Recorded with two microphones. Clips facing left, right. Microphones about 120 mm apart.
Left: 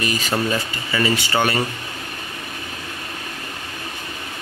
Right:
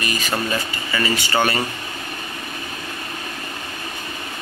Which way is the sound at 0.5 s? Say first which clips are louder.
Left 1 dB; 20° left (ahead or behind).